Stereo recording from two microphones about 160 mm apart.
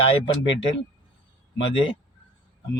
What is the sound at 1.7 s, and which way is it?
Speech, 35° left (ahead or behind).